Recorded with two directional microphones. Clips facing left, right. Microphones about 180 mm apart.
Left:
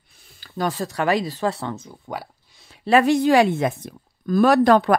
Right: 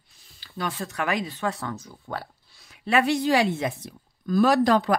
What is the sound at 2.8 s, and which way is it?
Speech, 40° left (ahead or behind).